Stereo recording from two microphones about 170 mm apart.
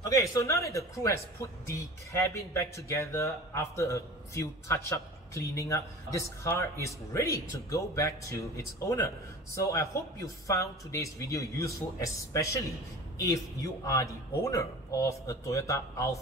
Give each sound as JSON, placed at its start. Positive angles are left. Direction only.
{"t": 0.0, "sound": "a man's voice", "side_deg": 20}
{"t": 13.8, "sound": "speech", "side_deg": 20}